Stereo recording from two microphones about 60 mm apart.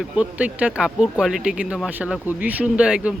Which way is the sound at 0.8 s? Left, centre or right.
Centre.